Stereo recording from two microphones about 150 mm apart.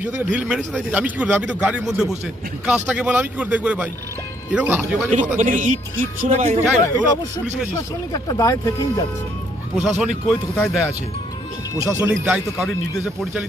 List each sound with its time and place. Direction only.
0.0 s a man's voice: 10° right (ahead or behind)
5.3 s speech: 55° right (ahead or behind)
6.8 s speech: 25° left (ahead or behind)
9.8 s speech: centre (ahead or behind)
11.8 s speech: 20° right (ahead or behind)
12.3 s speech: centre (ahead or behind)